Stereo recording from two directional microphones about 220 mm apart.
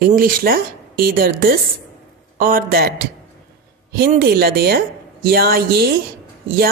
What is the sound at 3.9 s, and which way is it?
Speech, 40° right (ahead or behind).